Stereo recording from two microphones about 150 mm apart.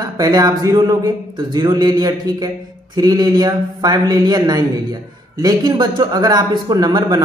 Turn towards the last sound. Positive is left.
turn(degrees=-25)  # may be behind; listen again after turning